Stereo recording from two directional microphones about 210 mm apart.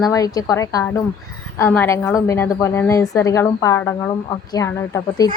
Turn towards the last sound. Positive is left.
turn(degrees=15)  # may be behind; listen again after turning